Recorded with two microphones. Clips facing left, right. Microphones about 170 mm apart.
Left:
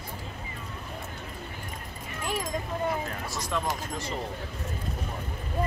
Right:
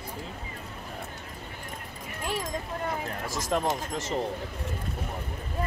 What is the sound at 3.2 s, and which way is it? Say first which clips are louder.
Speech: right 2 dB; 90° right.